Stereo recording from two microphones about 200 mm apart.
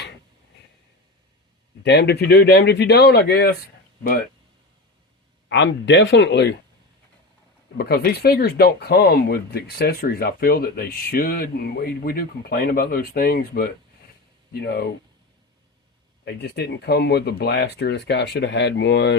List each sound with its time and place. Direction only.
1.8 s speech: 60° left (ahead or behind)
5.5 s speech: 60° left (ahead or behind)
7.8 s speech: 50° left (ahead or behind)
16.2 s speech: 55° left (ahead or behind)